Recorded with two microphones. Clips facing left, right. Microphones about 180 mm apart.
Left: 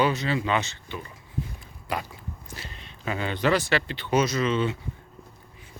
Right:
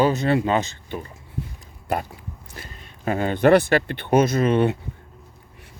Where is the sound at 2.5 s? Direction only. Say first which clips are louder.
Right 2 dB; 50° right (ahead or behind).